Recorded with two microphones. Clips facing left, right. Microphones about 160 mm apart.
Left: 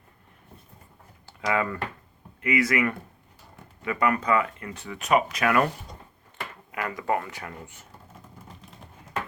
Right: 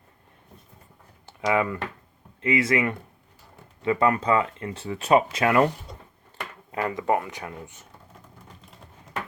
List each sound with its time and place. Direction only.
1.3 s speech: 20° right (ahead or behind)